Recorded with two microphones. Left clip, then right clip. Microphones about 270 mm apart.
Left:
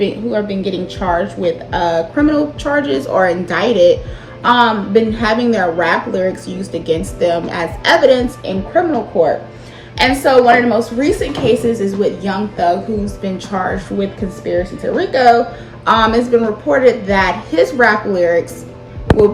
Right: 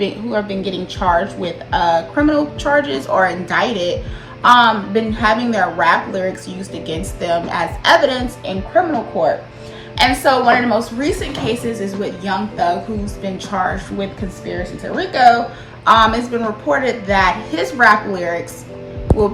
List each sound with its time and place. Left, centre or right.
0.0 s a woman's voice: centre
9.1 s speech: right
10.0 s a woman's voice: centre